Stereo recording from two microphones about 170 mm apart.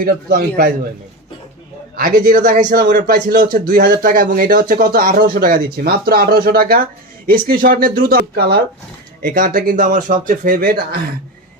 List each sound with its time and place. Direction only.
0.0 s a man's voice: 60° right (ahead or behind)
2.0 s a man's voice: 55° right (ahead or behind)